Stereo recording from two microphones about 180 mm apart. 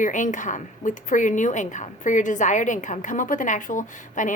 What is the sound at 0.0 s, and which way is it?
A woman's voice, 45° left (ahead or behind).